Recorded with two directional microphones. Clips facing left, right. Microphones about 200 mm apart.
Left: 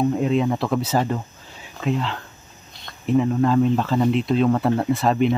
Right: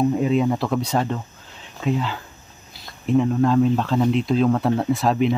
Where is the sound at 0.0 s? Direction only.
Centre (ahead or behind).